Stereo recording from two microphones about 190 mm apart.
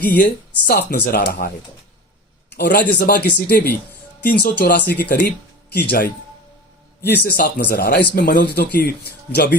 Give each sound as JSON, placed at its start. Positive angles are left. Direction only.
{"t": 0.0, "sound": "speech", "side_deg": 50}
{"t": 2.5, "sound": "a man's voice", "side_deg": 60}